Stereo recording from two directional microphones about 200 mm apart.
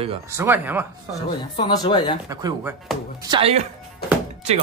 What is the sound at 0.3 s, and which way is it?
Speech, 10° right (ahead or behind).